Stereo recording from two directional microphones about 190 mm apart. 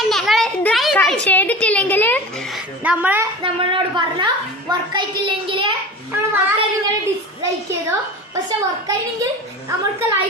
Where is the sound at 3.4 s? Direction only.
25° right (ahead or behind).